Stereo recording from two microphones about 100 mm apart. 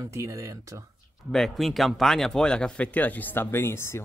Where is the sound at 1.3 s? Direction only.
Centre (ahead or behind).